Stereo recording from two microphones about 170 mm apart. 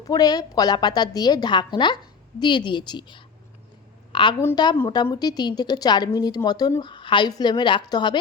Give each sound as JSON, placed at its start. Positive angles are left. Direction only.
{"t": 0.0, "sound": "a woman's voice", "side_deg": 20}